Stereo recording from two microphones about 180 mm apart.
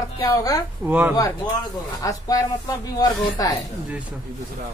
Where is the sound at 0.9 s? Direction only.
10° right (ahead or behind).